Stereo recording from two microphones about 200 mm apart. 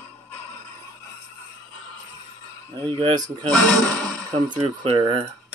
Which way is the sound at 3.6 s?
5° left (ahead or behind).